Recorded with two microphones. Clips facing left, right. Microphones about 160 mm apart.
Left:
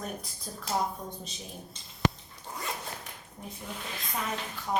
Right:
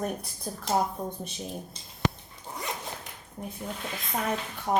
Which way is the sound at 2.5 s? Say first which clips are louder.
Right 2 dB; 20° right (ahead or behind).